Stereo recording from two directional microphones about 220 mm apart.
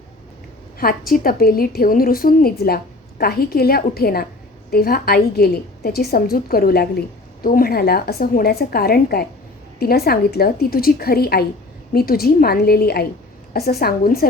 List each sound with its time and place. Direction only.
0.8 s a woman's voice: 40° left (ahead or behind)